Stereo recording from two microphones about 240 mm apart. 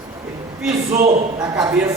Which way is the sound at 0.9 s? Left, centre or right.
Right.